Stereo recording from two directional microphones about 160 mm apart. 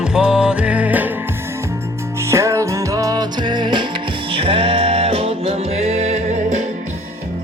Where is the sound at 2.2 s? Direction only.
15° right (ahead or behind); by 6.6 s 45° right (ahead or behind).